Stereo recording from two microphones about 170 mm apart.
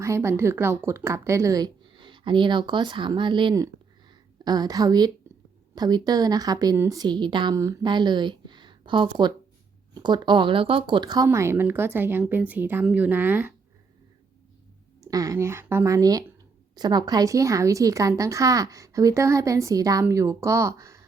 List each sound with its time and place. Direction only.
0.0 s a woman's voice: 15° right (ahead or behind)
15.0 s a woman's voice: 20° right (ahead or behind)